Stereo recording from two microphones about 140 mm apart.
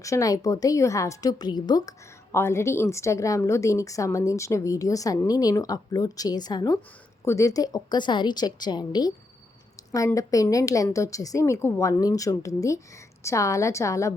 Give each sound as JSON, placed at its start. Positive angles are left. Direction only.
{"t": 0.0, "sound": "a woman's voice", "side_deg": 25}
{"t": 10.2, "sound": "a woman's voice", "side_deg": 25}